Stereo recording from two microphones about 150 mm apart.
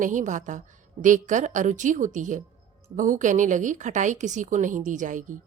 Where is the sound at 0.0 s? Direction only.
60° right (ahead or behind).